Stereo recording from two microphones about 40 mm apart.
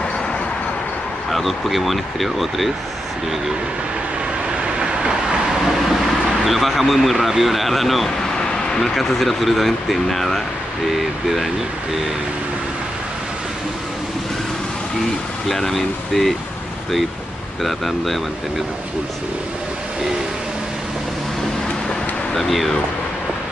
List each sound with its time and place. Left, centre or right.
1.3 s speech: centre
4.7 s vehicle: centre
5.9 s speech: centre
8.4 s a sound: centre
8.9 s speech: centre
15.4 s speech: centre
17.6 s speech: centre
22.3 s speech: centre